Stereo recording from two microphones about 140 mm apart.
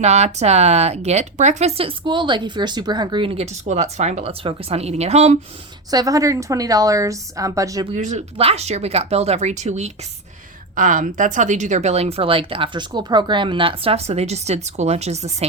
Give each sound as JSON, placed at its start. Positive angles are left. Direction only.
{"t": 0.0, "sound": "speech", "side_deg": -50}
{"t": 5.9, "sound": "a woman's voice", "side_deg": -25}
{"t": 7.9, "sound": "speech", "side_deg": -55}
{"t": 10.8, "sound": "speech", "side_deg": -70}